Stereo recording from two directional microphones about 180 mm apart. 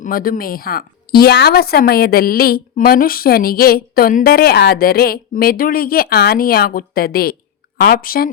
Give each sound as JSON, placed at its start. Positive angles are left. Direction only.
{"t": 0.0, "sound": "a woman's voice", "side_deg": 55}